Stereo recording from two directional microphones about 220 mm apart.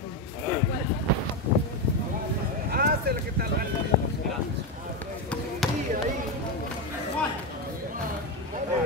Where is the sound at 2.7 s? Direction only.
45° right (ahead or behind).